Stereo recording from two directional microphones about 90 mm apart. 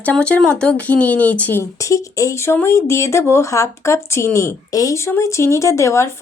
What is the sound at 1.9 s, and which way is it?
Speech, 35° left (ahead or behind).